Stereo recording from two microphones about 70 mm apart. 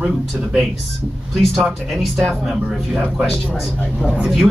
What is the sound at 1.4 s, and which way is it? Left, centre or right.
Speech, centre.